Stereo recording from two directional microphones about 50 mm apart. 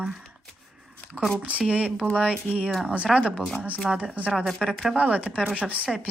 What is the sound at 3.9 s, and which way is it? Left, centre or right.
Speech, centre.